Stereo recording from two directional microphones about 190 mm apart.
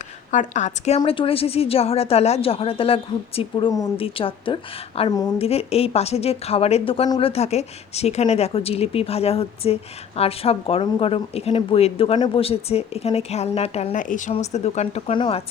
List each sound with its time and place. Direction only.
0.3 s a woman's voice: 40° left (ahead or behind); by 5.3 s 20° left (ahead or behind)
5.4 s a woman's voice: 30° left (ahead or behind)